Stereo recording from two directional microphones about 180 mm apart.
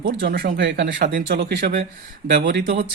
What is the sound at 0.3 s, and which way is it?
Speech, 60° right (ahead or behind).